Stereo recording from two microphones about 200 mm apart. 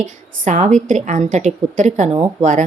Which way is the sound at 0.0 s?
35° right (ahead or behind).